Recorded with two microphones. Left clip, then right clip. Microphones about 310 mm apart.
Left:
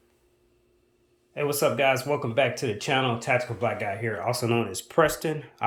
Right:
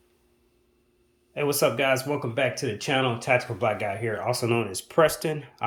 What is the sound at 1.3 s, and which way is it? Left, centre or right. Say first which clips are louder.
Speech: right 1 dB; centre.